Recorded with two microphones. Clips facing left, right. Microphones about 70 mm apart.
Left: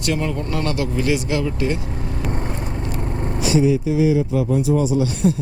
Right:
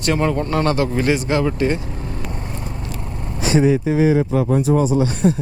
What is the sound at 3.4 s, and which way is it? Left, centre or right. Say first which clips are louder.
Speech: right 2 dB; right.